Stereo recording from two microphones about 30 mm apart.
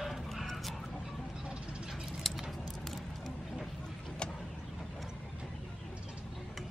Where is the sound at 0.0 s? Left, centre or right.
Centre.